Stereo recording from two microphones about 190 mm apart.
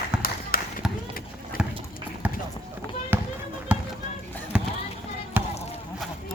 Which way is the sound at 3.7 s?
10° right (ahead or behind).